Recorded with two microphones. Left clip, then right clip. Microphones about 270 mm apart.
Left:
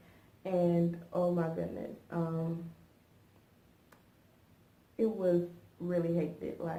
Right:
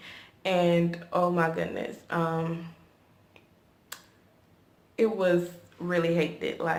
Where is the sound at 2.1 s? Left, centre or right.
Centre.